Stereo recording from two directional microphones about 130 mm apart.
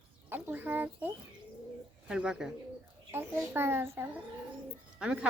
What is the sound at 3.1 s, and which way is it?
Speech, 15° right (ahead or behind).